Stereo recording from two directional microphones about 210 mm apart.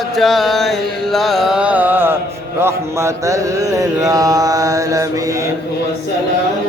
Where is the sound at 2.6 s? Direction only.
15° right (ahead or behind).